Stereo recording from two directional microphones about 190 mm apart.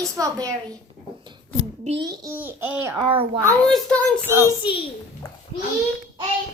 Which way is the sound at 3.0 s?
25° right (ahead or behind).